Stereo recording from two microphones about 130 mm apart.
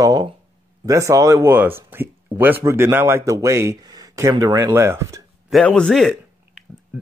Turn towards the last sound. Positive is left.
turn(degrees=0)  # may be behind; listen again after turning